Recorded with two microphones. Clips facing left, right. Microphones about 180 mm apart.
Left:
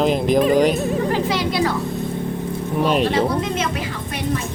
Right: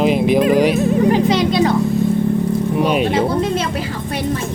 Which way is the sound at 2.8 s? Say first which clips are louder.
Even; 5° right (ahead or behind).